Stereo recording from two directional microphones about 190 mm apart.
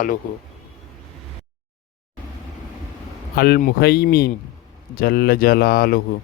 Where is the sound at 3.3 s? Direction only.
55° left (ahead or behind).